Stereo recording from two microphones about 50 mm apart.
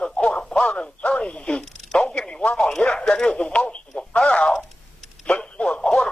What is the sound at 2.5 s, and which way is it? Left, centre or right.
Speech, centre.